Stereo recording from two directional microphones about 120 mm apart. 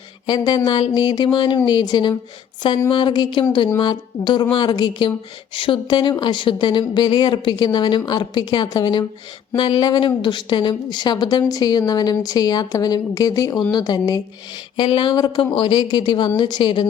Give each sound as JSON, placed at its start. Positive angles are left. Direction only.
{"t": 0.3, "sound": "a woman's voice", "side_deg": 35}
{"t": 14.8, "sound": "a woman's voice", "side_deg": 45}